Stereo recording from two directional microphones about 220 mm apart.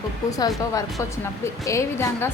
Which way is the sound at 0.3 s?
15° left (ahead or behind).